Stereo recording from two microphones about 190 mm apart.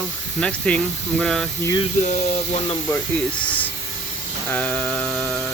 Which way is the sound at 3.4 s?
10° left (ahead or behind).